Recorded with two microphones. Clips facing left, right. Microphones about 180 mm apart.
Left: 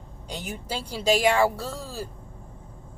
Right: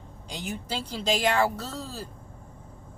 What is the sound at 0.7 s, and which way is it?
A woman's voice, 10° left (ahead or behind).